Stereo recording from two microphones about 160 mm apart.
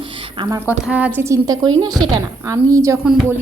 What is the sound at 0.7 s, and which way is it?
A woman's voice, 10° right (ahead or behind).